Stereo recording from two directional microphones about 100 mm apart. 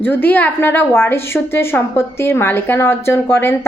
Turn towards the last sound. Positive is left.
turn(degrees=25)  # may be behind; listen again after turning